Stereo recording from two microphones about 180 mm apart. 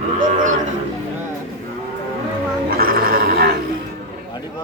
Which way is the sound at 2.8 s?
55° right (ahead or behind).